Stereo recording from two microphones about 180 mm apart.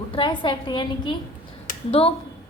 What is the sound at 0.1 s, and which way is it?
A woman's voice, 25° left (ahead or behind).